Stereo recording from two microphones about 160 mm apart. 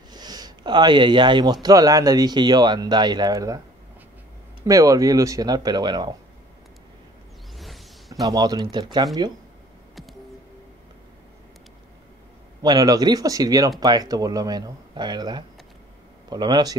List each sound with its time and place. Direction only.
0.1 s speech: 25° right (ahead or behind)
4.6 s speech: 20° right (ahead or behind)
7.5 s a sound: centre (ahead or behind)
8.1 s speech: 20° right (ahead or behind)
12.6 s speech: 25° right (ahead or behind)